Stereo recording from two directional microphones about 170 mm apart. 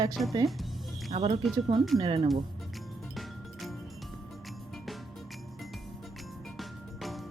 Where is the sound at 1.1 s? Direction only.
35° right (ahead or behind).